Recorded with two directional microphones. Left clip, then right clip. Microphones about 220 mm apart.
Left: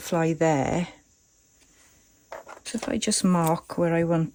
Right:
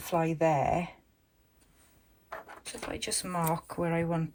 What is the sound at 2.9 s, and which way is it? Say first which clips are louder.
Speech: left 9 dB; 25° left (ahead or behind).